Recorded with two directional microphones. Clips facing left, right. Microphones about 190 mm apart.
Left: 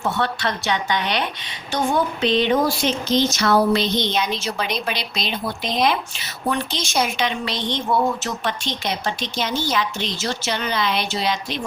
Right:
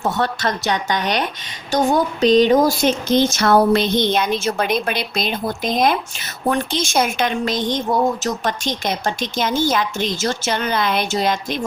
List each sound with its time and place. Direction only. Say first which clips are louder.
0.0 s speech: right 2 dB; 40° right (ahead or behind)